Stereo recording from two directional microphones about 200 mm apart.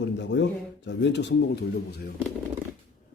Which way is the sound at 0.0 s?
60° left (ahead or behind).